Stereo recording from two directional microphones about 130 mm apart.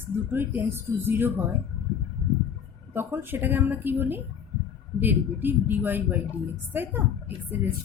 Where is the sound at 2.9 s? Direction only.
15° right (ahead or behind).